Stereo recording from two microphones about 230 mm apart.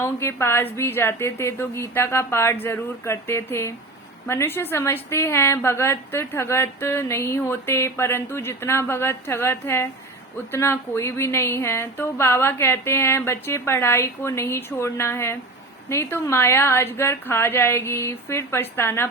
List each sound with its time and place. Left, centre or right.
0.0 s a woman's voice: centre